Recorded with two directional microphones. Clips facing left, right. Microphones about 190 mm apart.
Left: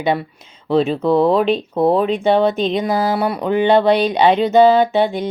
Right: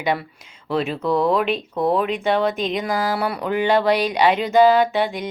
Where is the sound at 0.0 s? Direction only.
25° left (ahead or behind).